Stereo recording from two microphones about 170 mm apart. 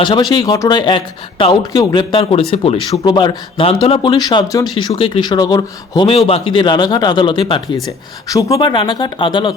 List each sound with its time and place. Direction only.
0.0 s speech: 25° left (ahead or behind)
6.1 s speech: 35° left (ahead or behind)